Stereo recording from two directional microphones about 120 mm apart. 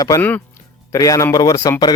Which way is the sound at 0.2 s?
15° left (ahead or behind).